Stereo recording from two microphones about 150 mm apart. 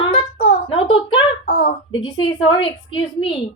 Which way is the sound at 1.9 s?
35° left (ahead or behind).